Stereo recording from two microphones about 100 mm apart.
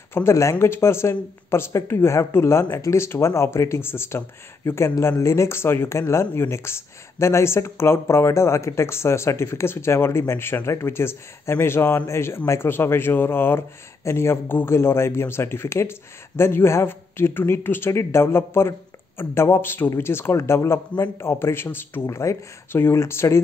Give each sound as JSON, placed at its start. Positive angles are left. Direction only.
{"t": 0.1, "sound": "speech", "side_deg": 25}